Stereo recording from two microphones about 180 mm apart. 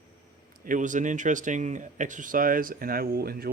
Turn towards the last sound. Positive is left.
turn(degrees=-55)  # may be behind; listen again after turning